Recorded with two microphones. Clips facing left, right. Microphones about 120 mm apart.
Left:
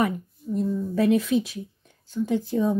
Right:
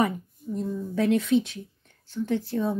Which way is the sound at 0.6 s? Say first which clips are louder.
Left 3 dB; centre (ahead or behind).